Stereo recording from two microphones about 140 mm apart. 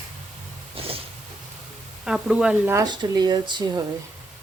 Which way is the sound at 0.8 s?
45° right (ahead or behind).